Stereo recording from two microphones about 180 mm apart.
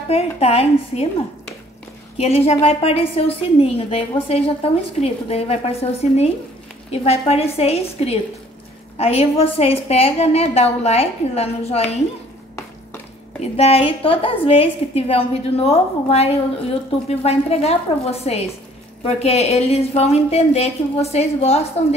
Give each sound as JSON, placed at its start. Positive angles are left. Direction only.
{"t": 0.1, "sound": "a woman's voice", "side_deg": 35}
{"t": 2.1, "sound": "a woman's voice", "side_deg": 35}
{"t": 13.4, "sound": "a woman's voice", "side_deg": 35}